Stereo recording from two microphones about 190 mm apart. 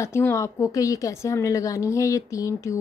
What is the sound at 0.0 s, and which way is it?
A woman's voice, 15° left (ahead or behind).